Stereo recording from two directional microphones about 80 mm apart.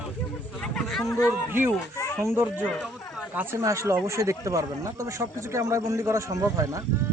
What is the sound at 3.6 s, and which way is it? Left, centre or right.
Speech, right.